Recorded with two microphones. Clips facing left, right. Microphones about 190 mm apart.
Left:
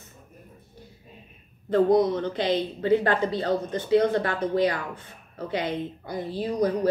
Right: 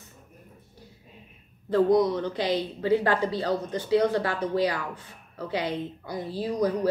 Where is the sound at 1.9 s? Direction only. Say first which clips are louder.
Left 1 dB; 50° left (ahead or behind).